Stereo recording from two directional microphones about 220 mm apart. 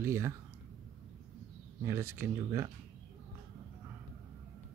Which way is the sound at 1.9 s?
10° right (ahead or behind).